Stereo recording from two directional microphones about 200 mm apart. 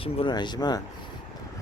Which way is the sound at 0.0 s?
25° left (ahead or behind).